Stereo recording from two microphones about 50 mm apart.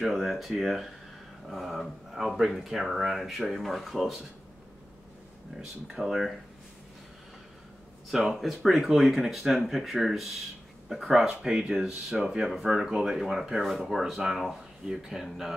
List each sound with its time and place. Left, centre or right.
0.0 s speech: centre
5.9 s speech: centre
8.1 s speech: centre